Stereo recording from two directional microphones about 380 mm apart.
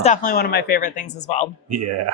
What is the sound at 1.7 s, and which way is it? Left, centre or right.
Speech, right.